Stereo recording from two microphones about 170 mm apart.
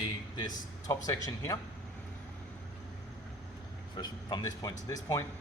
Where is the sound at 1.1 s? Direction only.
20° left (ahead or behind).